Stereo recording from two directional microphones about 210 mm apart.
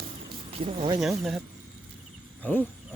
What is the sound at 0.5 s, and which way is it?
Speech, 30° right (ahead or behind).